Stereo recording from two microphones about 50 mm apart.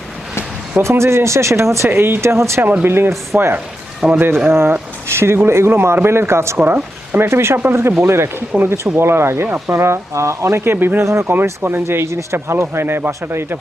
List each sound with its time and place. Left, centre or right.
0.8 s speech: right
1.9 s speech: right
2.8 s speech: right
4.0 s a man's voice: right
4.4 s speech: right
6.7 s speech: right
7.3 s speech: right
11.0 s speech: right
11.6 s speech: right